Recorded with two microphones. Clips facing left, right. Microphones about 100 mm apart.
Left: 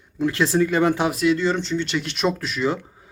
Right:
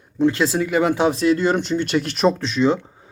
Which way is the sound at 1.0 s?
35° right (ahead or behind).